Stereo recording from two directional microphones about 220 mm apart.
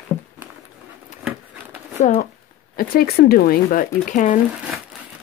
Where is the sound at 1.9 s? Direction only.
35° left (ahead or behind).